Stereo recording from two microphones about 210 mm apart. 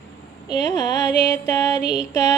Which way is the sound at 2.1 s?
20° left (ahead or behind).